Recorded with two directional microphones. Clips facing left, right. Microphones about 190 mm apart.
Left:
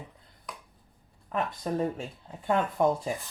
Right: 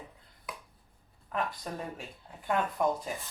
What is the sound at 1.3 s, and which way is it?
Speech, 25° left (ahead or behind).